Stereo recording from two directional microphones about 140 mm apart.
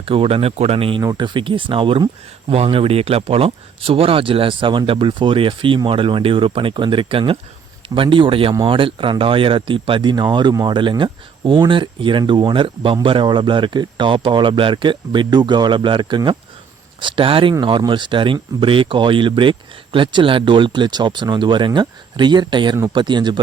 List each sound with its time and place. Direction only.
0.0 s speech: 40° right (ahead or behind)